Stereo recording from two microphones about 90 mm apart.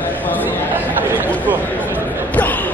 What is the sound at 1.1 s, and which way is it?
Chatter, 20° right (ahead or behind).